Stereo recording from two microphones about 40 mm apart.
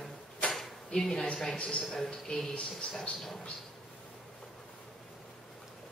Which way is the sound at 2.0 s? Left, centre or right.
Centre.